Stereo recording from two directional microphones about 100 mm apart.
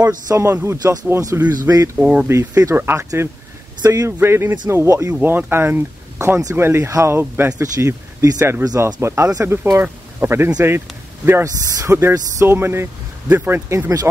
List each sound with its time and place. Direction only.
0.0 s speech: 35° right (ahead or behind)
1.5 s speech: 40° right (ahead or behind)
2.0 s speech: 10° right (ahead or behind)
2.2 s speech: 30° right (ahead or behind)
3.8 s speech: 35° right (ahead or behind)
7.6 s speech: 35° right (ahead or behind)